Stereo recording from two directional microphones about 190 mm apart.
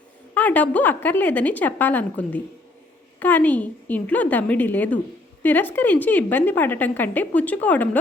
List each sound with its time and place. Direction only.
0.3 s a woman's voice: 10° left (ahead or behind)